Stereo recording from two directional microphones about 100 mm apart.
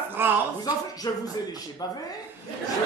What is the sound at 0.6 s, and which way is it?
Speech, 40° left (ahead or behind).